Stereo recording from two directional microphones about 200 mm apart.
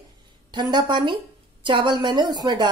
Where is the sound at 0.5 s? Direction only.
20° right (ahead or behind).